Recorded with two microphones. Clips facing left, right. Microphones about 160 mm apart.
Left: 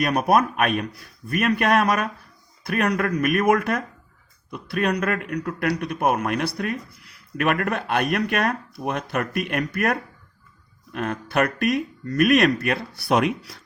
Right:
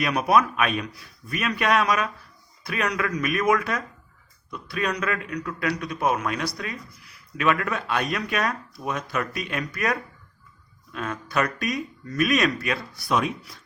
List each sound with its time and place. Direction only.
0.0 s a man's voice: 50° left (ahead or behind); by 13.6 s 70° left (ahead or behind)